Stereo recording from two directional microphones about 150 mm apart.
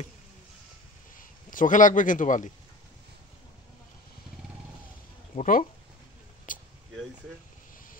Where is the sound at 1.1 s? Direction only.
60° left (ahead or behind).